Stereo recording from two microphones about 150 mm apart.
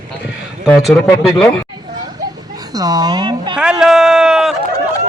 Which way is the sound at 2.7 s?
25° right (ahead or behind).